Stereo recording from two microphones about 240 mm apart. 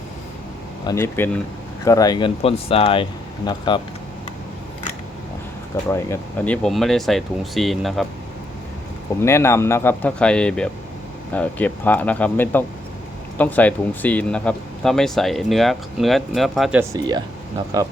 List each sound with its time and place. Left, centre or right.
0.9 s speech: centre
5.9 s speech: centre
9.2 s speech: centre
16.9 s speech: centre